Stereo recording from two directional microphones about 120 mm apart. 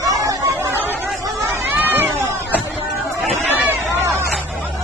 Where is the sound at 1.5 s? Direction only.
20° right (ahead or behind).